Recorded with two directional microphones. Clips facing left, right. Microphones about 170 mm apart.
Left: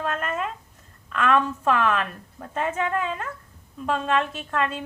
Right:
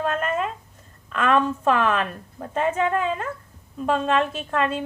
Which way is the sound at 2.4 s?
20° right (ahead or behind).